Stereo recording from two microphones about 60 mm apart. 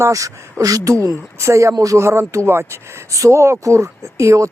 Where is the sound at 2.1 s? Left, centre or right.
Right.